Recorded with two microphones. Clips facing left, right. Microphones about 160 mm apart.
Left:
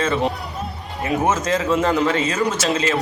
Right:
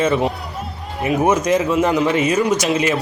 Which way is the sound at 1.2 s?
20° right (ahead or behind).